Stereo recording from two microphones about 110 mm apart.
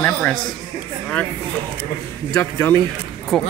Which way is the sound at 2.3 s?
25° left (ahead or behind).